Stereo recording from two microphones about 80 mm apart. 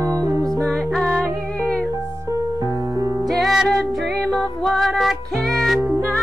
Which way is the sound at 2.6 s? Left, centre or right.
Right.